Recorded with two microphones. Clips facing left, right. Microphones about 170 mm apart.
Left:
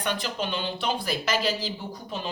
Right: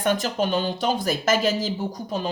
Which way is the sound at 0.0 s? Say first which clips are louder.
Right 7 dB; 45° right (ahead or behind).